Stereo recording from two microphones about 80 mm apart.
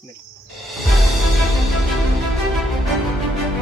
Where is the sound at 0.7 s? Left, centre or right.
Centre.